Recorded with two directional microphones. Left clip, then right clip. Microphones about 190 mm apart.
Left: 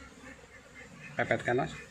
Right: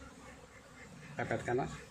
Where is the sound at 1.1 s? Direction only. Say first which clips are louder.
Left 6 dB; 35° left (ahead or behind).